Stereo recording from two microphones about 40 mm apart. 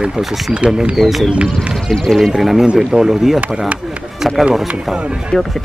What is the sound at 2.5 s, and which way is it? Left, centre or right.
Speech, centre.